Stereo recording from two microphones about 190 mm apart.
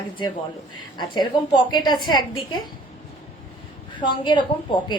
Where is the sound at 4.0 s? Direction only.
25° left (ahead or behind).